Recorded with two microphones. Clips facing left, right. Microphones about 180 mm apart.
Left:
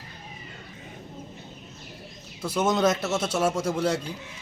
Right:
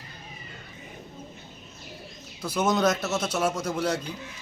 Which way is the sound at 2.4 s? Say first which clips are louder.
Left 1 dB; 25° left (ahead or behind).